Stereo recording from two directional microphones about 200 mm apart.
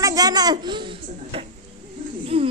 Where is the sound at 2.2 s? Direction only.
25° right (ahead or behind).